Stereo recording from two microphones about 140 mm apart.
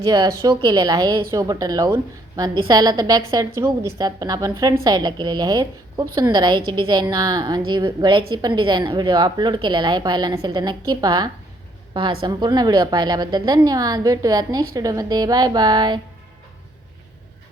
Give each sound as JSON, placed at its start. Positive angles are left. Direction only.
{"t": 0.0, "sound": "a woman's voice", "side_deg": -25}